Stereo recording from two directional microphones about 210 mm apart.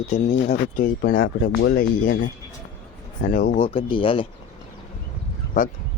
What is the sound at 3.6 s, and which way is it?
Speech, 25° left (ahead or behind).